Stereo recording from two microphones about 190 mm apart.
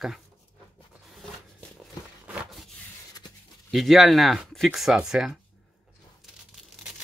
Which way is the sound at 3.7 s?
Centre (ahead or behind).